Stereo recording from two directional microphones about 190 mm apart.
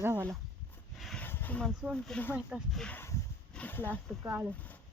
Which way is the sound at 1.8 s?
Centre (ahead or behind).